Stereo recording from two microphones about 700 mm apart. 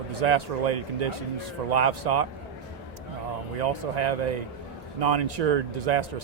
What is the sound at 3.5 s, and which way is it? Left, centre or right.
A man's voice, right.